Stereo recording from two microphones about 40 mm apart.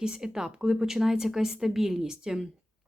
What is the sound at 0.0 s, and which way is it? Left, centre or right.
Speech, centre.